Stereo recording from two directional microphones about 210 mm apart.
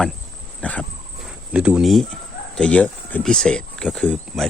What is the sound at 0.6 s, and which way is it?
Wild animals, 5° left (ahead or behind).